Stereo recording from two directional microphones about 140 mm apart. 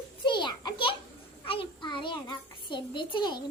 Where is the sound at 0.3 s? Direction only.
35° left (ahead or behind).